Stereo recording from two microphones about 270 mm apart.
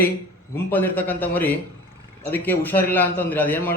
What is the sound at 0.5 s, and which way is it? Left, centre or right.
A man's voice, centre.